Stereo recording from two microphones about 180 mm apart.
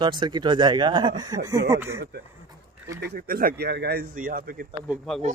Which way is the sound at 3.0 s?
60° right (ahead or behind).